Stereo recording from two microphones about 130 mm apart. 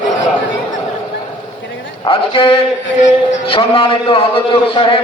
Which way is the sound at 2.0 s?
45° left (ahead or behind).